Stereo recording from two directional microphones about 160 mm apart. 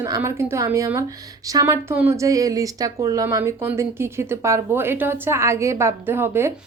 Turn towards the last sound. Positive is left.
turn(degrees=-15)  # may be behind; listen again after turning